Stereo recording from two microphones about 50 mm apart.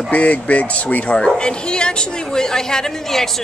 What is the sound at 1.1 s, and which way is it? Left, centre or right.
A woman's voice, centre.